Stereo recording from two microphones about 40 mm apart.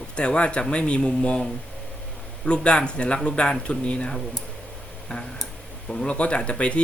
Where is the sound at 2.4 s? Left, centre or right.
Left.